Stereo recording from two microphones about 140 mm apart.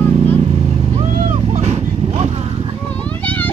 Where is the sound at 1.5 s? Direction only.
50° right (ahead or behind).